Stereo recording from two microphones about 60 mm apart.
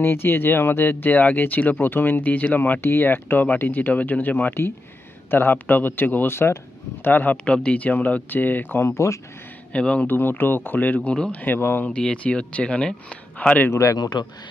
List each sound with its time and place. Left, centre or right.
0.0 s speech: left
7.4 s speech: centre; by 8.9 s left
8.9 s a man's voice: left
9.7 s speech: centre
10.0 s speech: left
11.8 s speech: centre
13.7 s a man's voice: left